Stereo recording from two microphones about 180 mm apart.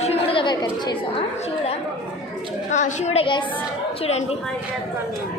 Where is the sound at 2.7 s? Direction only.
40° left (ahead or behind).